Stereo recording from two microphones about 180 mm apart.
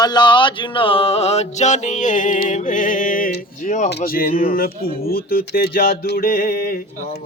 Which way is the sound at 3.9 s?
55° left (ahead or behind).